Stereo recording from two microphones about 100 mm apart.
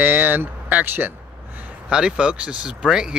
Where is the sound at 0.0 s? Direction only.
20° right (ahead or behind).